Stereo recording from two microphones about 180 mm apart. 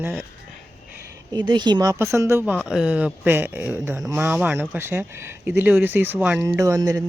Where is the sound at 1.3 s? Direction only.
25° right (ahead or behind).